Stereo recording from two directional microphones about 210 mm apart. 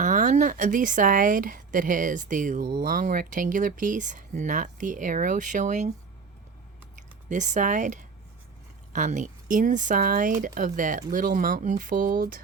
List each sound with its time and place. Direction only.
0.0 s speech: 35° right (ahead or behind)
7.3 s speech: 35° right (ahead or behind)